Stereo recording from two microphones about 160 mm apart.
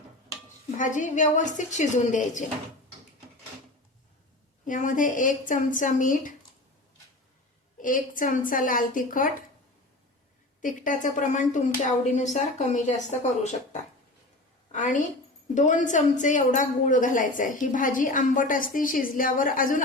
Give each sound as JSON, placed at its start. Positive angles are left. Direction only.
{"t": 0.8, "sound": "speech", "side_deg": 50}
{"t": 4.6, "sound": "a woman's voice", "side_deg": 55}
{"t": 7.8, "sound": "a woman's voice", "side_deg": 55}
{"t": 10.6, "sound": "speech", "side_deg": 55}
{"t": 14.7, "sound": "a woman's voice", "side_deg": 50}